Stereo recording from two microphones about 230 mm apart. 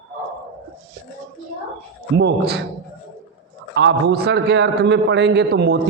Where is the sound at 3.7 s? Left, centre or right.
Right.